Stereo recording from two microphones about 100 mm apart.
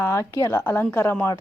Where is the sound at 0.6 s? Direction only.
15° left (ahead or behind).